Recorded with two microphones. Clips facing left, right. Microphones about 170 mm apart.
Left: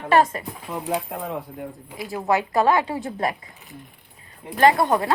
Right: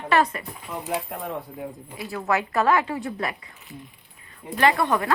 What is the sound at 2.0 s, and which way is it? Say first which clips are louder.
A woman's voice: left 3 dB; 20° left (ahead or behind).